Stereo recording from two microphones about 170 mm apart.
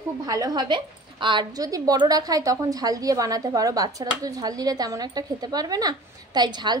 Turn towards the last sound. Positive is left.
turn(degrees=-25)  # may be behind; listen again after turning